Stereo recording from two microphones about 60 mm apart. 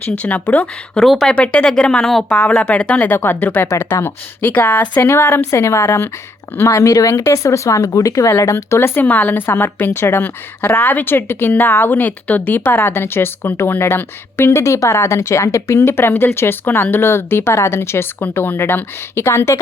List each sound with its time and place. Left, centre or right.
0.2 s speech: left
0.9 s speech: centre
1.4 s speech: centre
3.1 s a woman's voice: left
3.7 s a woman's voice: left
5.5 s speech: left
8.4 s speech: left
9.0 s a woman's voice: left
14.6 s a woman's voice: left